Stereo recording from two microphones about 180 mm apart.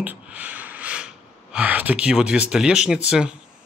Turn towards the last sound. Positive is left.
turn(degrees=-5)  # may be behind; listen again after turning